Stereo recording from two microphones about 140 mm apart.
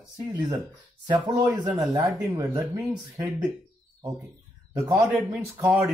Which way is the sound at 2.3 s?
25° right (ahead or behind).